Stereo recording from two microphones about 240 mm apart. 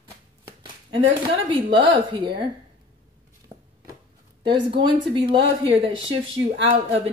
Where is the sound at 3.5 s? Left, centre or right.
Centre.